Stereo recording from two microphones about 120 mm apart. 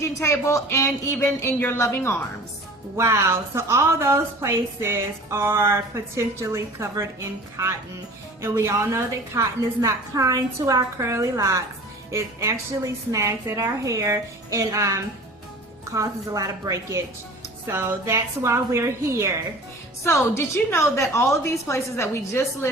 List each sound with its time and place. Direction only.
0.0 s a woman's voice: 25° left (ahead or behind)
2.9 s a woman's voice: 25° right (ahead or behind)
20.1 s a woman's voice: 20° left (ahead or behind)